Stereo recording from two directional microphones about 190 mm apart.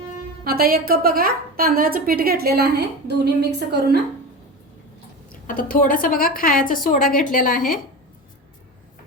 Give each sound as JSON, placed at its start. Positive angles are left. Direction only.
{"t": 0.4, "sound": "a woman's voice", "side_deg": -50}
{"t": 5.3, "sound": "a sound", "side_deg": 50}
{"t": 5.7, "sound": "a woman's voice", "side_deg": 45}